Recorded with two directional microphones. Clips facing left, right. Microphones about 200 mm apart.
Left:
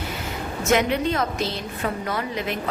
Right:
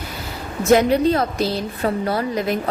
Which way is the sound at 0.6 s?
35° right (ahead or behind).